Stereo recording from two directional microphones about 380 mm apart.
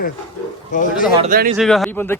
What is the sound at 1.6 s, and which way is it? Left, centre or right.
Speech, centre.